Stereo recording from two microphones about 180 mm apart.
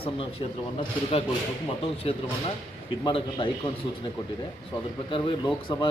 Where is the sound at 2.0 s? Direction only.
35° left (ahead or behind).